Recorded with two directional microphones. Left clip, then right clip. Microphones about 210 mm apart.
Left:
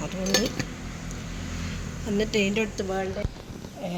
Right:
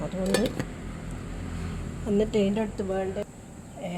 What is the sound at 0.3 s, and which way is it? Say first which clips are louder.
Speech: left 3 dB; 10° left (ahead or behind).